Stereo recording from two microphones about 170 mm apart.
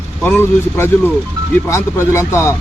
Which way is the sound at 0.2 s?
10° left (ahead or behind).